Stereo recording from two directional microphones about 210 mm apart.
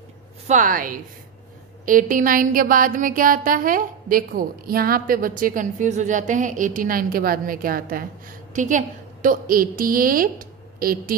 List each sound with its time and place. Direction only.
0.5 s a woman's voice: 40° right (ahead or behind)